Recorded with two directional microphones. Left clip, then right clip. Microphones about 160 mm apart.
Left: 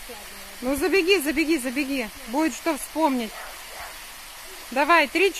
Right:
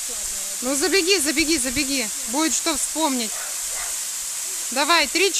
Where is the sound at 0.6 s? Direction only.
15° right (ahead or behind).